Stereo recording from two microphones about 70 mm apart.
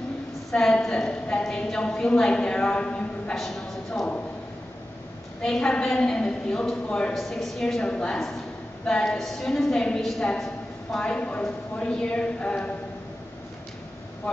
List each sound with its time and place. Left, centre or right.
0.5 s a woman's voice: centre
5.4 s a woman's voice: centre